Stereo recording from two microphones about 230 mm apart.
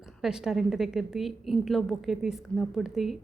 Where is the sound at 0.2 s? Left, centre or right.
Centre.